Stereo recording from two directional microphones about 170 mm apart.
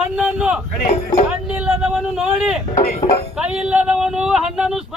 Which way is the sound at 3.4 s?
5° right (ahead or behind).